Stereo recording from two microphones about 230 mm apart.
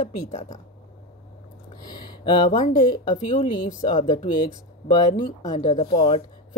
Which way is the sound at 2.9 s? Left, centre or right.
Left.